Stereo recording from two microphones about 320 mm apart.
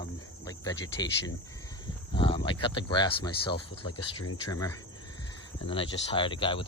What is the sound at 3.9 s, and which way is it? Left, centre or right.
Speech, left.